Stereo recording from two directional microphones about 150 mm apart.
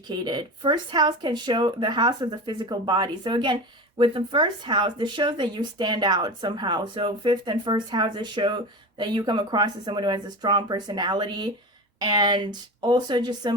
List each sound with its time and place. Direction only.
0.1 s speech: 30° right (ahead or behind)